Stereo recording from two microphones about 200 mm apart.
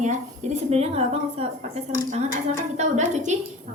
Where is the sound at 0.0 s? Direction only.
35° right (ahead or behind).